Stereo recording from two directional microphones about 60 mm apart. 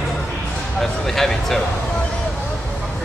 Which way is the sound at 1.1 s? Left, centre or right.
Centre.